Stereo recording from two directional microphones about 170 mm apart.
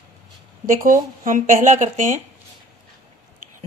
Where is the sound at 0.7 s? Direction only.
50° right (ahead or behind).